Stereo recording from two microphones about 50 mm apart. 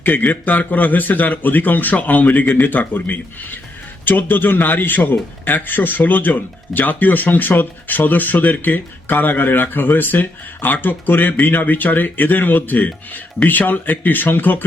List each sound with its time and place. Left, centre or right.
0.0 s a man's voice: left